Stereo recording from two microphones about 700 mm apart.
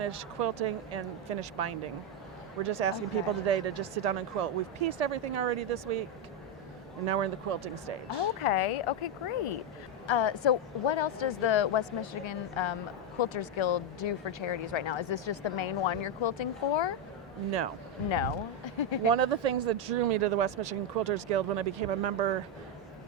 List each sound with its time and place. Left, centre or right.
0.0 s speech: right
7.1 s speech: right
8.4 s speech: left
18.1 s speech: left
19.1 s speech: right